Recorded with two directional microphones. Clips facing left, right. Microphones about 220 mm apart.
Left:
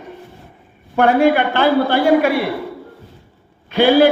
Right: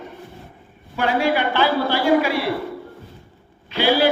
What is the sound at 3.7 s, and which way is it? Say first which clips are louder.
Speech: left 7 dB; 50° left (ahead or behind).